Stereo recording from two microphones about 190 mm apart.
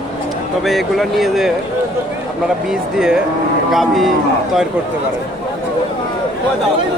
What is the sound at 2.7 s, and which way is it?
Speech, 5° right (ahead or behind).